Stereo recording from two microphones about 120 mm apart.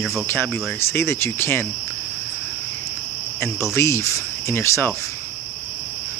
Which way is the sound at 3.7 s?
25° left (ahead or behind).